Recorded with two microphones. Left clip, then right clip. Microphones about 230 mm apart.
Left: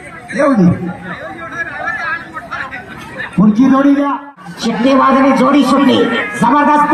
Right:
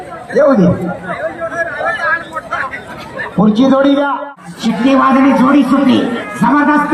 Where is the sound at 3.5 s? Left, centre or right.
Right.